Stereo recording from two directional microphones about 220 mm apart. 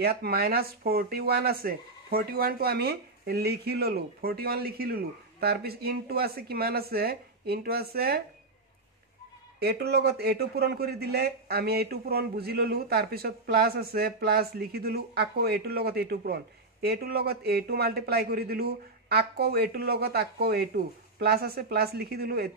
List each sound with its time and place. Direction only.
0.0 s speech: 45° right (ahead or behind)
9.6 s speech: 45° right (ahead or behind)